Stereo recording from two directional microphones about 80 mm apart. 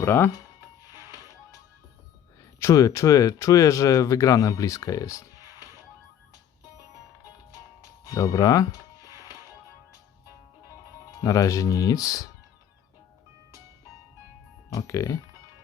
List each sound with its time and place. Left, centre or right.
0.0 s speech: left
1.0 s music: right
2.4 s speech: left
8.0 s music: left
11.2 s speech: left
14.7 s speech: left